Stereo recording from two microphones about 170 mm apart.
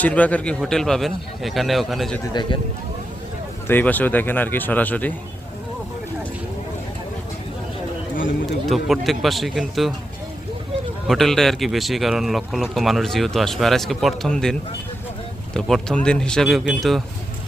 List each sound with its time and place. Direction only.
0.0 s speech: 10° left (ahead or behind)
2.3 s speech: 25° left (ahead or behind)
3.7 s speech: 10° left (ahead or behind)
8.7 s speech: centre (ahead or behind)
11.1 s speech: centre (ahead or behind)
15.5 s speech: 5° left (ahead or behind)